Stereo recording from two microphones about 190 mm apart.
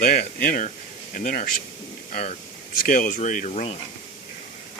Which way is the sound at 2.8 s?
45° left (ahead or behind).